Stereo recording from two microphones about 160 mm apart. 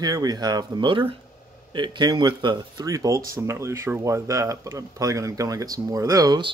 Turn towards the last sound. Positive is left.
turn(degrees=-25)  # may be behind; listen again after turning